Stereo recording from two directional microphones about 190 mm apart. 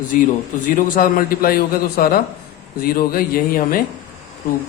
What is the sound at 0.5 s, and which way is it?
A man's voice, 45° left (ahead or behind).